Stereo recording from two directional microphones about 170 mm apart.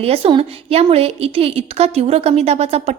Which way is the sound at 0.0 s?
35° right (ahead or behind).